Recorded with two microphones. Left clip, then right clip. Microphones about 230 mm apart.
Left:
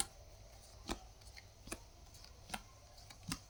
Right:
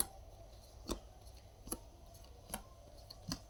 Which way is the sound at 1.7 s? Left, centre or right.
Centre.